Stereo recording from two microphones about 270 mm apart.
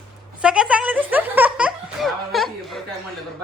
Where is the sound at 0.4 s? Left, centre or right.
Centre.